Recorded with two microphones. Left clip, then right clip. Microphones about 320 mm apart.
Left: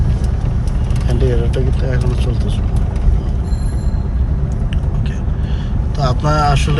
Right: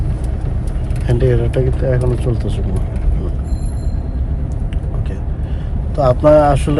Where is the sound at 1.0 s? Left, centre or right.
Right.